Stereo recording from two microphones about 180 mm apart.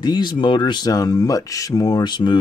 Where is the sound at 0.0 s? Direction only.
25° left (ahead or behind).